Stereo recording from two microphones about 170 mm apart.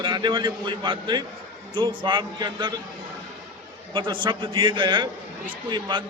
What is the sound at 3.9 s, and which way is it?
A man's voice, 30° right (ahead or behind).